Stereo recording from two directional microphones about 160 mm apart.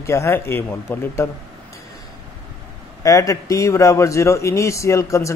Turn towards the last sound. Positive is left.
turn(degrees=20)  # may be behind; listen again after turning